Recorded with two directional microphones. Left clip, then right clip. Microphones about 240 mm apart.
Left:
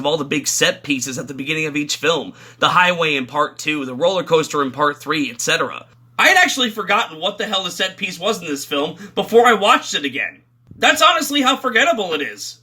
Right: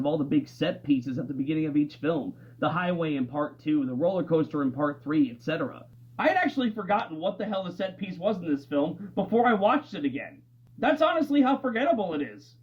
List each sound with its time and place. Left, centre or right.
0.0 s speech: left
6.1 s speech: centre